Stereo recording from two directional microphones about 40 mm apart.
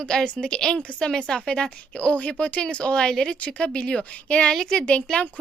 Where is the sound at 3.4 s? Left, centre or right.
Left.